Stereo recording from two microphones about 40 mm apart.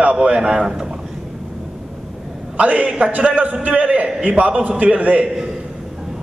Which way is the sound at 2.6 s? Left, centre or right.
Right.